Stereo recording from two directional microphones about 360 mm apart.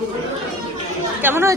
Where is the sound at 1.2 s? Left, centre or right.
Centre.